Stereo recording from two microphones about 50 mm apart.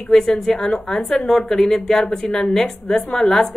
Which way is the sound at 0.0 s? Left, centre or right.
Centre.